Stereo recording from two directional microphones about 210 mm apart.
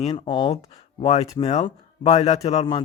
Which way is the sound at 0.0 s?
20° left (ahead or behind).